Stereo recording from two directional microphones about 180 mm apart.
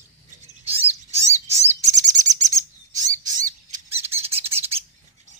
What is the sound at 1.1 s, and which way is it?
Bird, 40° right (ahead or behind).